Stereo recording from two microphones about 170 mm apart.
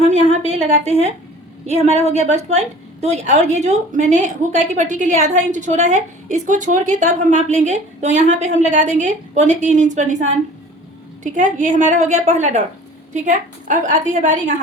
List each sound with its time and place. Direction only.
0.1 s a woman's voice: 40° right (ahead or behind)
2.0 s speech: 40° left (ahead or behind)
2.2 s a woman's voice: 40° right (ahead or behind)